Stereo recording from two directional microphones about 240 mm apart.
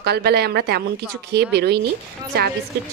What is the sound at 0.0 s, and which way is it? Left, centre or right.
A woman's voice, right.